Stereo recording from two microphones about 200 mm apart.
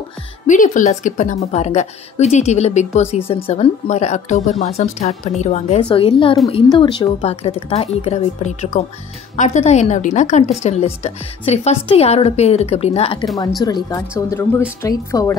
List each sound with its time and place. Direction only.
0.5 s a woman's voice: 40° left (ahead or behind)
13.6 s a woman's voice: 20° left (ahead or behind)